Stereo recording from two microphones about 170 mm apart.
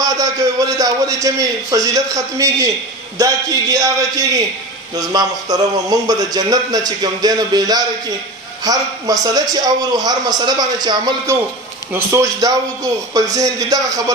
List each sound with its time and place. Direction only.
0.0 s a man's voice: 20° right (ahead or behind)
4.9 s a man's voice: 20° right (ahead or behind)